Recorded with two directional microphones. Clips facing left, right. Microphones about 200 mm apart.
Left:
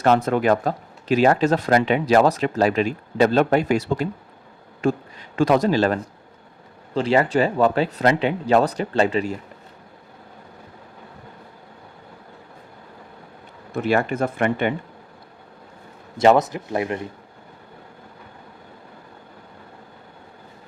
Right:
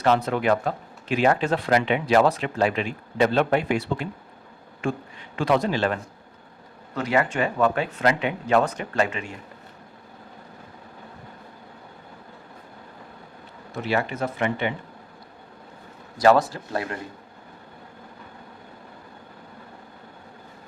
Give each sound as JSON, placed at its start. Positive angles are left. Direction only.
{"t": 0.0, "sound": "speech", "side_deg": 50}
{"t": 13.8, "sound": "speech", "side_deg": 50}
{"t": 16.1, "sound": "speech", "side_deg": 20}